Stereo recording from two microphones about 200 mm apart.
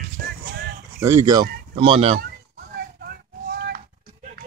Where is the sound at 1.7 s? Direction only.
25° right (ahead or behind).